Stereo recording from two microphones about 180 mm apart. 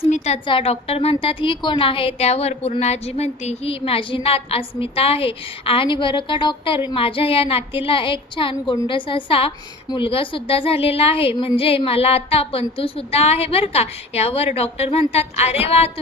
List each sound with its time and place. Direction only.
0.4 s a woman's voice: 30° left (ahead or behind)